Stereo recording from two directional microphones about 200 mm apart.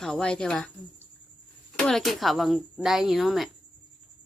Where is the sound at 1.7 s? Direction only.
Centre (ahead or behind).